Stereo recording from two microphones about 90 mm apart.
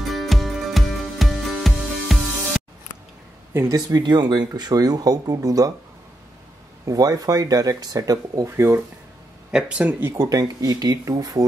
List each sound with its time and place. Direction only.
0.1 s music: centre (ahead or behind)
3.5 s speech: 40° right (ahead or behind)
6.9 s speech: 40° right (ahead or behind)
9.5 s speech: 10° right (ahead or behind)
10.2 s speech: 40° right (ahead or behind)